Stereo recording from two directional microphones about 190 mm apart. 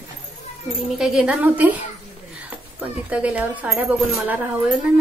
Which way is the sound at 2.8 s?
5° right (ahead or behind).